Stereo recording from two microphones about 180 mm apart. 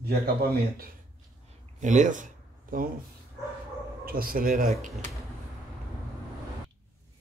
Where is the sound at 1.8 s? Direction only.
45° right (ahead or behind).